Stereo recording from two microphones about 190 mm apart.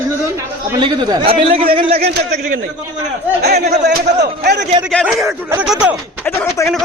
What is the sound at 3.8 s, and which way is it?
Speech, 60° right (ahead or behind).